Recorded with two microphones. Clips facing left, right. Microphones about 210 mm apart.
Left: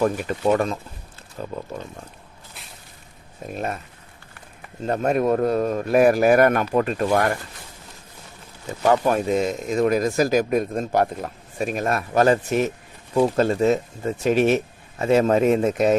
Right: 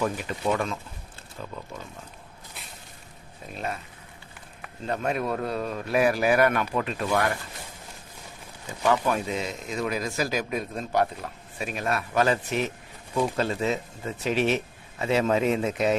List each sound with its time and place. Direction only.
0.5 s speech: 40° left (ahead or behind)
3.4 s speech: 50° left (ahead or behind)
4.9 s speech: 45° left (ahead or behind)
8.8 s speech: 45° left (ahead or behind)